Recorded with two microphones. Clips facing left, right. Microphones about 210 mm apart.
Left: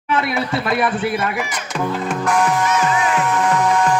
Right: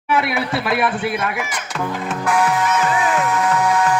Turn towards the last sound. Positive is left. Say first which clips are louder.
# left 1 dB
turn(degrees=-5)  # may be behind; listen again after turning